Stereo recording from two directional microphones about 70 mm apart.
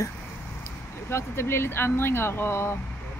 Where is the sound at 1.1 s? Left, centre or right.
Left.